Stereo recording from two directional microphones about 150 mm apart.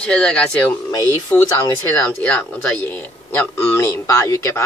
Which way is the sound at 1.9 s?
10° left (ahead or behind).